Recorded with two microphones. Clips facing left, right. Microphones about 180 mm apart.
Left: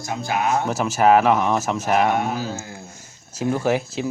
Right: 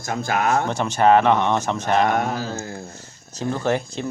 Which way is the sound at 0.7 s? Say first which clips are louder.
Left 1 dB; 5° left (ahead or behind).